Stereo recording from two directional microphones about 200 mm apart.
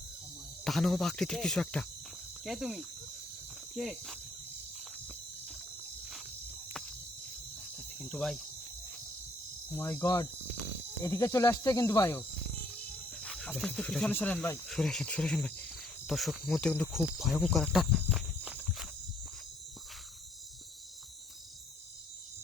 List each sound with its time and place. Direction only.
0.6 s cricket: centre (ahead or behind)
7.9 s speech: 5° left (ahead or behind)
9.7 s speech: 10° left (ahead or behind)
14.7 s cricket: centre (ahead or behind)
16.9 s walk: centre (ahead or behind)